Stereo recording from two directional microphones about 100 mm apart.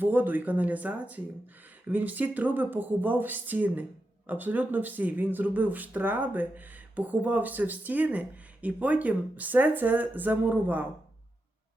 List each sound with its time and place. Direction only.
0.0 s speech: 15° right (ahead or behind)